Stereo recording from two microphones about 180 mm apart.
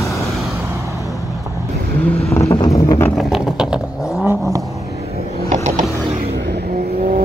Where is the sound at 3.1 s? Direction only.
Centre (ahead or behind).